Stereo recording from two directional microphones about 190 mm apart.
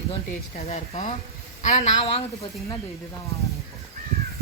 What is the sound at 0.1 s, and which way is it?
Speech, 35° left (ahead or behind).